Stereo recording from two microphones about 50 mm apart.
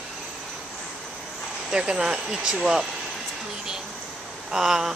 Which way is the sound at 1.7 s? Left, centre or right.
Centre.